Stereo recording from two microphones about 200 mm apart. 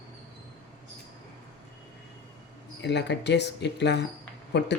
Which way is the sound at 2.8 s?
60° left (ahead or behind).